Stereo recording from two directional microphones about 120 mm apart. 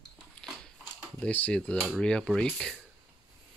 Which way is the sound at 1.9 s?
5° left (ahead or behind).